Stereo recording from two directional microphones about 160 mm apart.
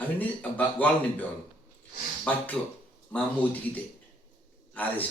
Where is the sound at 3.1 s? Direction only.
10° left (ahead or behind).